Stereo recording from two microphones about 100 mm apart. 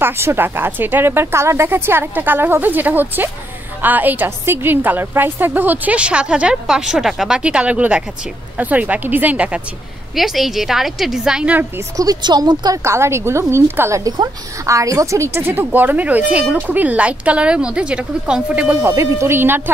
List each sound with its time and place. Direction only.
0.0 s a woman's voice: 25° right (ahead or behind)
10.1 s a woman's voice: centre (ahead or behind)
12.0 s speech: 45° right (ahead or behind)
12.8 s a woman's voice: 25° right (ahead or behind)
18.9 s speech: 30° right (ahead or behind)